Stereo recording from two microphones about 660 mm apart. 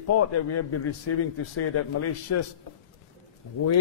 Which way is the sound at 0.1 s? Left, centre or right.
Left.